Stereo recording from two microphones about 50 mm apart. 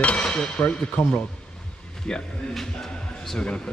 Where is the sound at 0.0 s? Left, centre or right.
Left.